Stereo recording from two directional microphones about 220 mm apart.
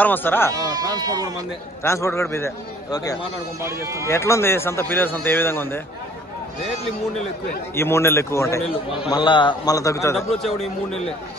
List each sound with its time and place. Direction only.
0.0 s a man's voice: 10° left (ahead or behind)
0.5 s speech: 15° right (ahead or behind)
1.8 s a man's voice: 10° left (ahead or behind)
3.6 s speech: 10° right (ahead or behind)
4.1 s a man's voice: 10° left (ahead or behind)
7.7 s a man's voice: 10° left (ahead or behind)